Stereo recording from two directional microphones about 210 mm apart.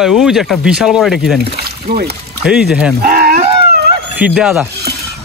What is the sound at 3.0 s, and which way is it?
Speech, 45° right (ahead or behind).